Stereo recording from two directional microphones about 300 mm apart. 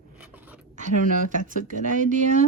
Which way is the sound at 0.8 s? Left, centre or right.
Right.